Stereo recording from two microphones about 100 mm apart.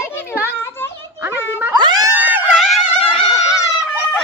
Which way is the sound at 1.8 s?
45° right (ahead or behind).